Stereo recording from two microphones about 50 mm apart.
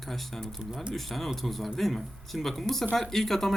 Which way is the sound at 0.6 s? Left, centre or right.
Centre.